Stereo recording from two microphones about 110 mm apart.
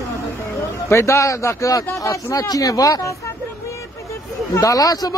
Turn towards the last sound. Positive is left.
turn(degrees=35)  # may be behind; listen again after turning